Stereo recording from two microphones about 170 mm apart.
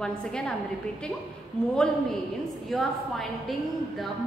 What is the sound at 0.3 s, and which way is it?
Speech, 5° left (ahead or behind).